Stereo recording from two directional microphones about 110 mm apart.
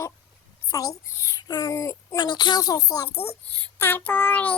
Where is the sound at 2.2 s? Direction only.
45° left (ahead or behind).